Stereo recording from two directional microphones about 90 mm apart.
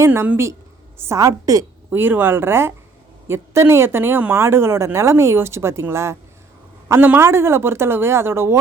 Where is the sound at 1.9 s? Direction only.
25° right (ahead or behind).